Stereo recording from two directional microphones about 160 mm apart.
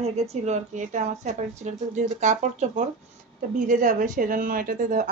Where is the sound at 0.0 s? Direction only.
40° right (ahead or behind).